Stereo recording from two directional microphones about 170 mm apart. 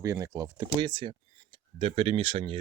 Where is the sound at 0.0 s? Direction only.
20° right (ahead or behind).